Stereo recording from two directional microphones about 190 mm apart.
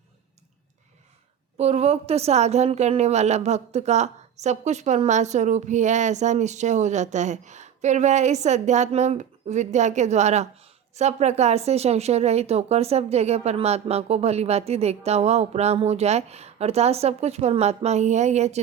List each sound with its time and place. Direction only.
1.5 s a woman's voice: 35° right (ahead or behind)